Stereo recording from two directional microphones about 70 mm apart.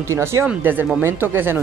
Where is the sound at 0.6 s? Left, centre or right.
Right.